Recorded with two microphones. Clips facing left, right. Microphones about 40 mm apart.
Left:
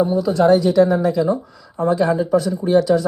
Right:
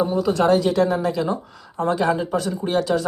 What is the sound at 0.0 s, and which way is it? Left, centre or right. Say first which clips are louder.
Speech: left 3 dB; right.